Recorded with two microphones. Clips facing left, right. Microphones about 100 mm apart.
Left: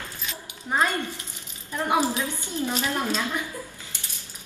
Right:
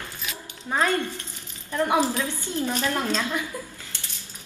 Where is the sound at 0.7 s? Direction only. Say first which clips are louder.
Right 1 dB; 15° left (ahead or behind).